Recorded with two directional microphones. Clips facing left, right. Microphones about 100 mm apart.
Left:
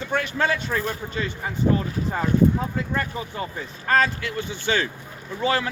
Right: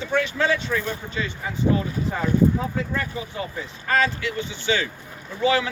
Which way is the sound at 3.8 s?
40° left (ahead or behind).